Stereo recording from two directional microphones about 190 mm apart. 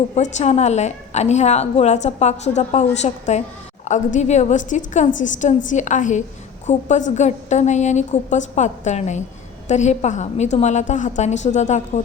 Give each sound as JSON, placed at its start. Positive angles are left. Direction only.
{"t": 0.2, "sound": "a woman's voice", "side_deg": 35}